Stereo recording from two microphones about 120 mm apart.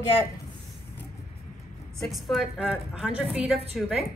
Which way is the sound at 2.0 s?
Centre (ahead or behind).